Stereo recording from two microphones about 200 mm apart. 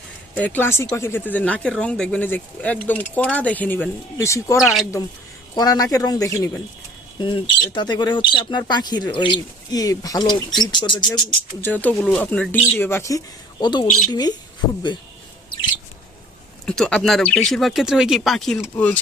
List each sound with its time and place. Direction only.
0.3 s speech: 10° left (ahead or behind)
4.6 s speech: centre (ahead or behind)
5.5 s speech: 20° left (ahead or behind)
11.6 s speech: 10° left (ahead or behind)
16.6 s speech: 5° left (ahead or behind)